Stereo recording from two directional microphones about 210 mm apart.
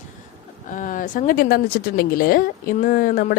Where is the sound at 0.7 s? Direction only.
40° left (ahead or behind).